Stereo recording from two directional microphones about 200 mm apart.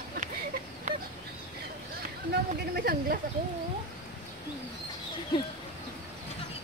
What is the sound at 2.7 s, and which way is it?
Speech, 50° right (ahead or behind).